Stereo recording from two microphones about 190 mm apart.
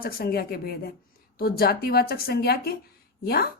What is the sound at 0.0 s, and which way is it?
Speech, 55° left (ahead or behind).